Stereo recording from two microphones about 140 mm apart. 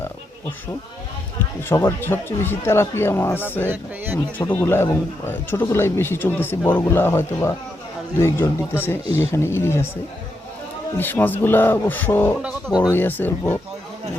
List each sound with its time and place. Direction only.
1.7 s a man's voice: 15° left (ahead or behind)
3.7 s speech: 15° right (ahead or behind)
4.4 s a man's voice: 15° left (ahead or behind)
10.9 s a man's voice: 15° left (ahead or behind)